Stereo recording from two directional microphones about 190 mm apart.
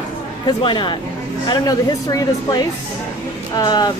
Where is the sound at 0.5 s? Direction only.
25° left (ahead or behind).